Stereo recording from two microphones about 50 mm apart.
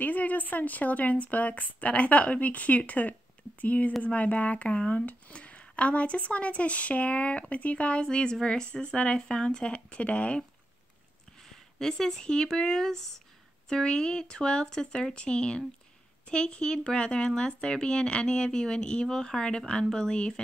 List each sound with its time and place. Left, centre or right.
0.0 s a woman's voice: left
11.4 s speech: centre